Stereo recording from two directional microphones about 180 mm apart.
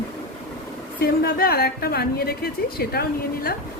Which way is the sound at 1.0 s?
60° left (ahead or behind).